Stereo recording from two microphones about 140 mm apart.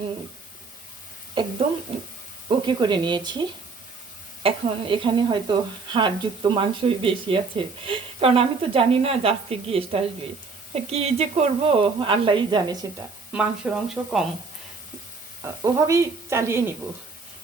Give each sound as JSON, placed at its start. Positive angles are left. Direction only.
{"t": 2.5, "sound": "speech", "side_deg": -35}
{"t": 4.4, "sound": "speech", "side_deg": -35}
{"t": 13.3, "sound": "speech", "side_deg": -5}
{"t": 15.6, "sound": "speech", "side_deg": -20}